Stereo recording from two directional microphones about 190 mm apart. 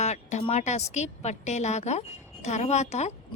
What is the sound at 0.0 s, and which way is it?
Speech, 35° left (ahead or behind).